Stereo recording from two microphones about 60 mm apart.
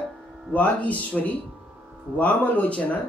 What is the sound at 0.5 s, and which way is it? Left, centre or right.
A man's voice, left.